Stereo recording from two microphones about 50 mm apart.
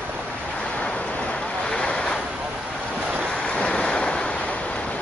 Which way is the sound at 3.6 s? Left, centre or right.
Centre.